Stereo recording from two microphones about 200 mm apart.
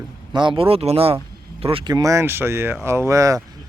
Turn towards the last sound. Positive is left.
turn(degrees=-15)  # may be behind; listen again after turning